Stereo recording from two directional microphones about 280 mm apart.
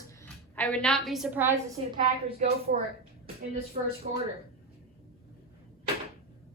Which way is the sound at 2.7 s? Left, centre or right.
Right.